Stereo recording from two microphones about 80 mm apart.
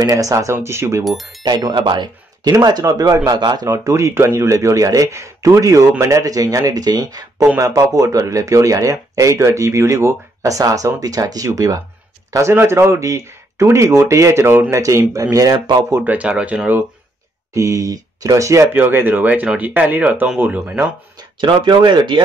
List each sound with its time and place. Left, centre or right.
0.1 s speech: right
1.0 s speech: centre
1.4 s speech: right
2.8 s speech: right
3.3 s a man's voice: right
3.6 s speech: right
14.8 s speech: right
15.3 s speech: right
16.0 s speech: centre
17.6 s speech: right
18.7 s speech: right
21.2 s speech: right